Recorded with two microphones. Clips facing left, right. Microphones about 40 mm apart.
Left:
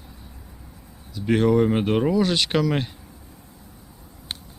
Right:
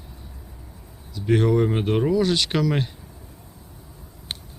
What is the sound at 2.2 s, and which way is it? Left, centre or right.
Speech, left.